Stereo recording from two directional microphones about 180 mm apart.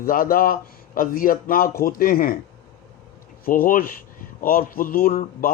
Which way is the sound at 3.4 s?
50° left (ahead or behind).